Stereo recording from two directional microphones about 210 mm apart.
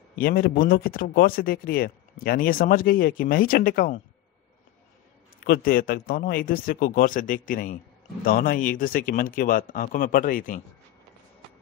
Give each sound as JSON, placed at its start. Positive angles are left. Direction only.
{"t": 0.2, "sound": "speech", "side_deg": 45}
{"t": 5.4, "sound": "speech", "side_deg": 45}